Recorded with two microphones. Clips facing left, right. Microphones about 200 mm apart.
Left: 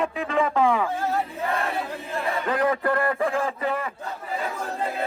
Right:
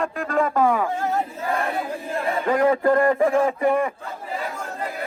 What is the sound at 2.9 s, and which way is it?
Speech, 15° right (ahead or behind).